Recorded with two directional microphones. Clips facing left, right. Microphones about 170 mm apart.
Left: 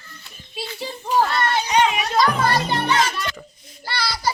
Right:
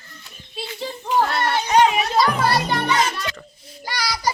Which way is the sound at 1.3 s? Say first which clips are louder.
Even; 60° right (ahead or behind).